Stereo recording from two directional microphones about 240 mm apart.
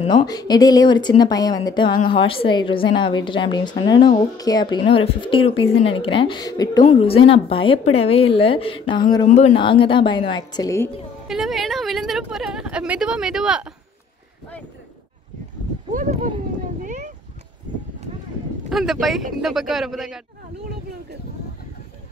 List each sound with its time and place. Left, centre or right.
0.0 s a woman's voice: centre
11.2 s a woman's voice: centre
15.9 s speech: right
16.8 s a sound: right
18.7 s speech: centre